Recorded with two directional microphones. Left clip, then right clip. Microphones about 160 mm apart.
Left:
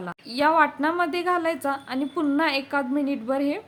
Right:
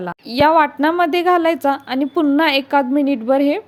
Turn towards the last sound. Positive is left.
turn(degrees=-40)  # may be behind; listen again after turning